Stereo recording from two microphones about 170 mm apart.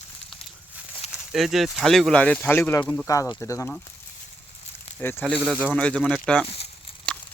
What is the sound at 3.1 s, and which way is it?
Speech, 20° left (ahead or behind).